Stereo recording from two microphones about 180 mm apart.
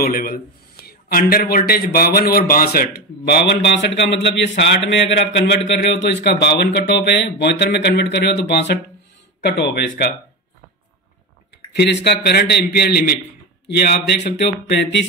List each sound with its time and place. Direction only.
0.0 s a man's voice: 55° left (ahead or behind); by 5.4 s 85° left
5.7 s speech: 70° left (ahead or behind)
11.7 s a man's voice: 65° left (ahead or behind)